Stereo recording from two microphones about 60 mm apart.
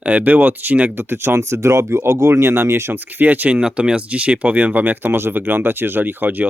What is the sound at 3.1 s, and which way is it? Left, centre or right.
Speech, right.